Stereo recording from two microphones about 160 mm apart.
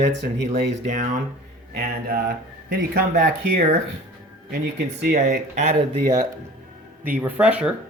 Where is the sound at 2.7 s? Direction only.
65° right (ahead or behind).